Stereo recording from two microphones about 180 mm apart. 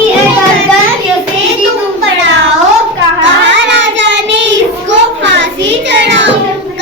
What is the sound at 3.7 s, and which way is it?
Child singing, 90° right.